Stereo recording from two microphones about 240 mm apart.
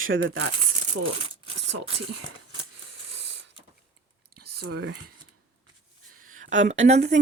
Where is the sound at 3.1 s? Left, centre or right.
Right.